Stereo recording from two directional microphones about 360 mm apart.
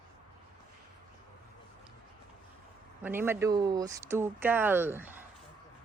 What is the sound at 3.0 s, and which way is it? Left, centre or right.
Speech, centre.